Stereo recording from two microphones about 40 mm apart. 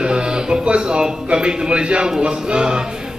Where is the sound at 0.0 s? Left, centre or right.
Right.